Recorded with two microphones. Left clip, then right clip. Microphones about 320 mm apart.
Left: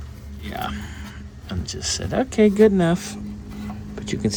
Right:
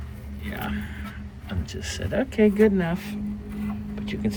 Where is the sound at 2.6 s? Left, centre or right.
Left.